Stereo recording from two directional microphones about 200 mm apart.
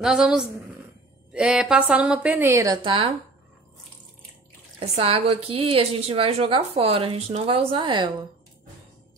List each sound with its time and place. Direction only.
0.0 s a woman's voice: 5° right (ahead or behind); by 3.1 s 25° right (ahead or behind)
4.7 s a woman's voice: 30° right (ahead or behind)